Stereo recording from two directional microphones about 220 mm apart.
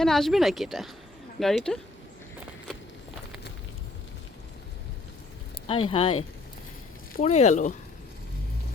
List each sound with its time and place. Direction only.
0.0 s speech: centre (ahead or behind)
5.6 s speech: 25° left (ahead or behind)